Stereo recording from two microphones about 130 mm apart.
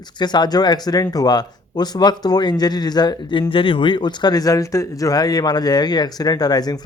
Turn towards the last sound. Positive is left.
turn(degrees=30)  # may be behind; listen again after turning